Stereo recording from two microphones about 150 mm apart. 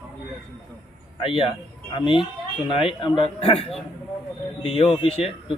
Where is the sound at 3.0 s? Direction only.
35° left (ahead or behind).